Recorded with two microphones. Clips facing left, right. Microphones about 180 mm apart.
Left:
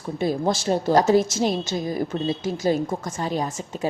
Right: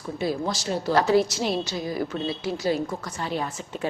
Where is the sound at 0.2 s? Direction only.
50° left (ahead or behind).